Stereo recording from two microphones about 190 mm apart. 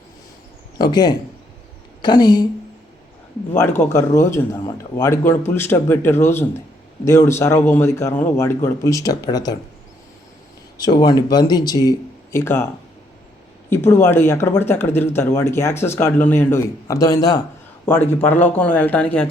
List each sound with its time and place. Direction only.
0.8 s speech: 20° left (ahead or behind)
3.5 s speech: 10° left (ahead or behind)
10.8 s speech: 20° left (ahead or behind)
13.7 s speech: 10° left (ahead or behind)